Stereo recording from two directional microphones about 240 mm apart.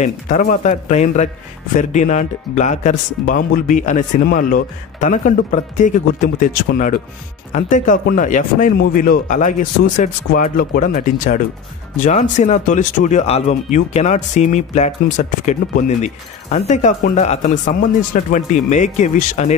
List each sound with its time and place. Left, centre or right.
0.0 s speech: left